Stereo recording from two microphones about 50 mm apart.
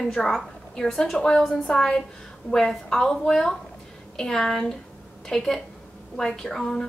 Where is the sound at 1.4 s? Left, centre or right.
Centre.